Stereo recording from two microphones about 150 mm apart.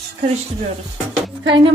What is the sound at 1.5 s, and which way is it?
Music, 30° right (ahead or behind).